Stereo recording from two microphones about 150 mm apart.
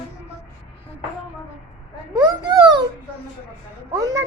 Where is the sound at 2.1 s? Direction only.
30° right (ahead or behind).